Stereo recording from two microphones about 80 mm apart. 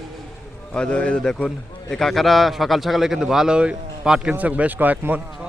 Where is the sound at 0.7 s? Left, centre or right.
Centre.